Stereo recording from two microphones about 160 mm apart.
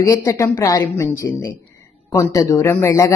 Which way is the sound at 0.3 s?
20° left (ahead or behind).